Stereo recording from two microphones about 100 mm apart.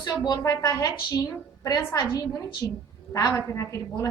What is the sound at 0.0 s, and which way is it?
A woman's voice, 35° left (ahead or behind).